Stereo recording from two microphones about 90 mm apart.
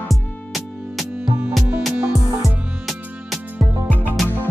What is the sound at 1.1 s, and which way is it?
Music, 20° right (ahead or behind).